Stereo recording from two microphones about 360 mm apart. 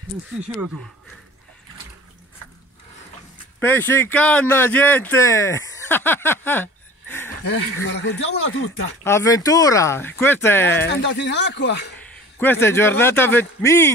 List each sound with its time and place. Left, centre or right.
3.5 s speech: centre
7.4 s speech: left
9.0 s speech: centre
10.9 s speech: left
12.4 s speech: centre